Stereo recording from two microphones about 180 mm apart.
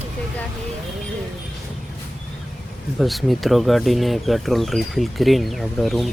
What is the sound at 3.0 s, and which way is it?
Speech, centre (ahead or behind).